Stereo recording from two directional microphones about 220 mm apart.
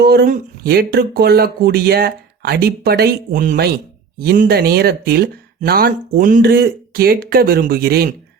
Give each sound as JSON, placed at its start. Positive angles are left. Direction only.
{"t": 0.0, "sound": "speech", "side_deg": -45}